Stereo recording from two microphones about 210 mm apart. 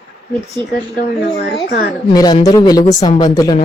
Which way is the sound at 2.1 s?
20° left (ahead or behind).